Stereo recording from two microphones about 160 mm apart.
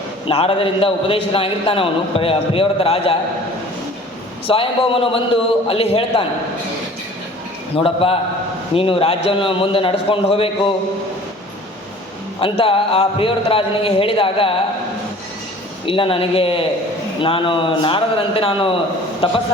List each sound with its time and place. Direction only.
0.3 s a man's voice: 35° left (ahead or behind)
4.4 s a man's voice: 35° left (ahead or behind)
7.7 s a man's voice: 35° left (ahead or behind)
12.4 s a man's voice: 35° left (ahead or behind)
15.9 s a man's voice: 35° left (ahead or behind)